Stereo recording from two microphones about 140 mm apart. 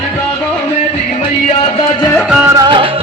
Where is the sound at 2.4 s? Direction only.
25° right (ahead or behind).